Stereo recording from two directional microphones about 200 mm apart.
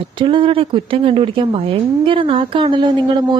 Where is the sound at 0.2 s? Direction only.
25° right (ahead or behind).